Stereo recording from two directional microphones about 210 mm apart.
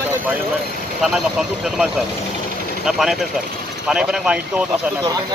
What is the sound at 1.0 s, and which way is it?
Speech, centre (ahead or behind).